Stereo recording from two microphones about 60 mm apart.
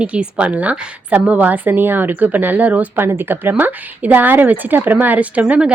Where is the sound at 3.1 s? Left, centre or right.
Right.